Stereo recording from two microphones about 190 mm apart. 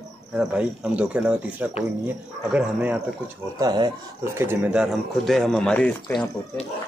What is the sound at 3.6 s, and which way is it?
A man's voice, 20° right (ahead or behind).